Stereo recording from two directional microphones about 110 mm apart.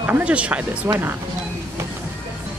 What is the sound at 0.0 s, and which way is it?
Speech, 15° right (ahead or behind).